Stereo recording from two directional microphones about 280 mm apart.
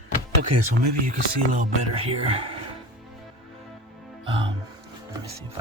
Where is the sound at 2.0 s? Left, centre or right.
Right.